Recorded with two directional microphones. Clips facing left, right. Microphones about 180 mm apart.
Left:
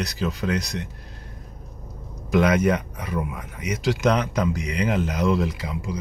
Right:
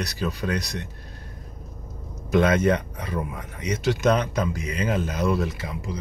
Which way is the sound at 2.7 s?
30° right (ahead or behind).